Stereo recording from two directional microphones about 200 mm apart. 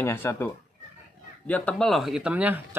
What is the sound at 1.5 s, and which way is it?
A man's voice, 5° left (ahead or behind).